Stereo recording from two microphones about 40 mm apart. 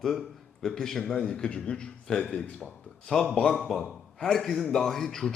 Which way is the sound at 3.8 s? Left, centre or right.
Centre.